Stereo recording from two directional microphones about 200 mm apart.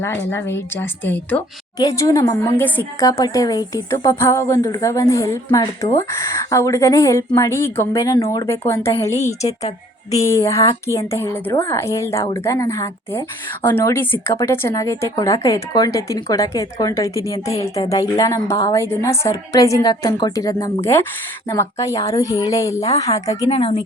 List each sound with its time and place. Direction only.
0.0 s a woman's voice: 10° left (ahead or behind)
9.1 s a woman's voice: 35° left (ahead or behind)
10.2 s a woman's voice: 15° left (ahead or behind)